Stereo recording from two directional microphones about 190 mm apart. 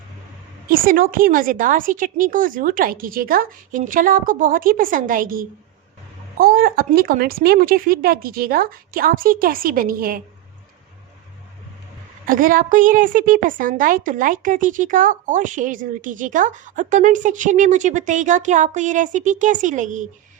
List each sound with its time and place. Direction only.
0.7 s a woman's voice: 45° right (ahead or behind)
12.2 s a woman's voice: 45° right (ahead or behind)